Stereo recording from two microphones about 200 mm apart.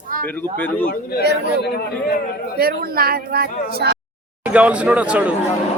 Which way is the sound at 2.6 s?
50° right (ahead or behind).